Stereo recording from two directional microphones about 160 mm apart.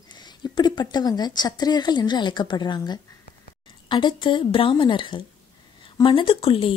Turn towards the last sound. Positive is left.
turn(degrees=35)  # may be behind; listen again after turning